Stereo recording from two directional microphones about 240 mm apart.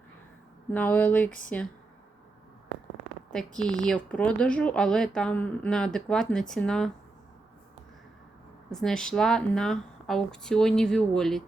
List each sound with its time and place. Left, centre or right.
0.7 s speech: centre
3.3 s a woman's voice: centre
8.7 s a woman's voice: centre